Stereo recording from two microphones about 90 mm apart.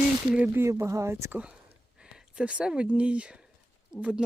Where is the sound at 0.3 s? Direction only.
15° right (ahead or behind).